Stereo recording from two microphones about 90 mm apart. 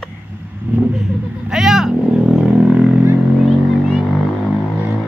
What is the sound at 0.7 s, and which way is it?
Vehicle, 20° right (ahead or behind).